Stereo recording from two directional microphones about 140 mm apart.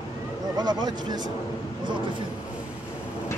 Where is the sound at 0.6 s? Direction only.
30° right (ahead or behind).